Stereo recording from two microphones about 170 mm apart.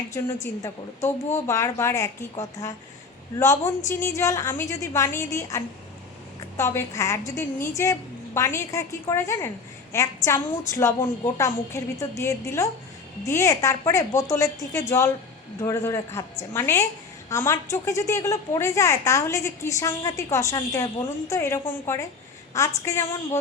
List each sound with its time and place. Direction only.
0.1 s a woman's voice: 15° left (ahead or behind)
1.5 s a woman's voice: 15° left (ahead or behind)